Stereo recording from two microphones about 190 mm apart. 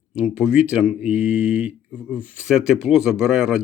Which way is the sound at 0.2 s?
5° right (ahead or behind).